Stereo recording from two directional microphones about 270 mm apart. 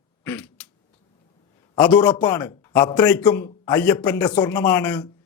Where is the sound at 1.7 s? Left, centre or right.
Centre.